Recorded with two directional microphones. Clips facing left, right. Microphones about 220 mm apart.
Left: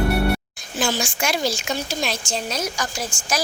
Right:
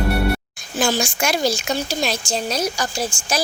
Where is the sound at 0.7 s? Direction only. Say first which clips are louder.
Right 3 dB; 45° right (ahead or behind).